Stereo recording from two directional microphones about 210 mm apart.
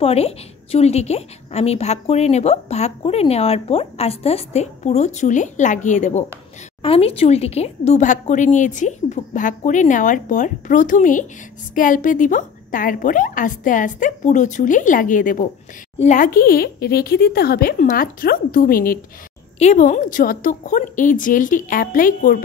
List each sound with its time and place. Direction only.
0.0 s a woman's voice: 30° left (ahead or behind)